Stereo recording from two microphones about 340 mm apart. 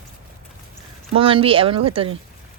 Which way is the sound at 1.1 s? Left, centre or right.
Centre.